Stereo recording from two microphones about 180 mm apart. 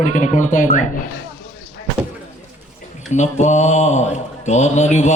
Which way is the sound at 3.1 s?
40° left (ahead or behind).